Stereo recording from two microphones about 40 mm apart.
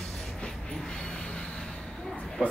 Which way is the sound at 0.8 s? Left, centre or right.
Centre.